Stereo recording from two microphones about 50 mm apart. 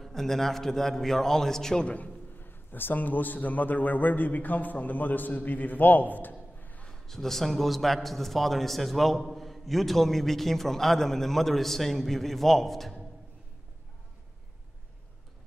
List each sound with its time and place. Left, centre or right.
0.0 s a man's voice: centre
2.3 s a man's voice: left
6.6 s a sound: left
7.1 s a man's voice: centre